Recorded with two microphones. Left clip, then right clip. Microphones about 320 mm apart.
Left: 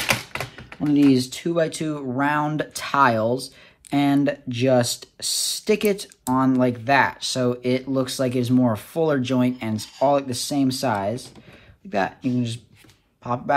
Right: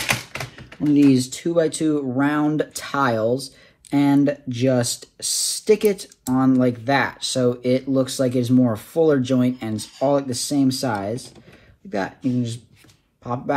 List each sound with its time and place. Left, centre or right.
0.1 s speech: left
3.3 s speech: left
3.9 s speech: left